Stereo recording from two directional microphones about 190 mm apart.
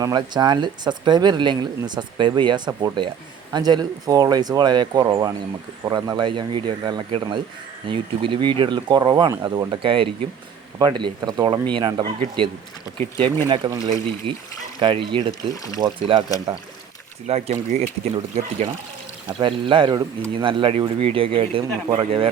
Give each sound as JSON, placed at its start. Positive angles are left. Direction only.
{"t": 0.0, "sound": "speech", "side_deg": -20}
{"t": 15.3, "sound": "speech", "side_deg": 20}
{"t": 15.8, "sound": "speech", "side_deg": -25}
{"t": 17.2, "sound": "speech", "side_deg": -35}
{"t": 19.3, "sound": "speech", "side_deg": -25}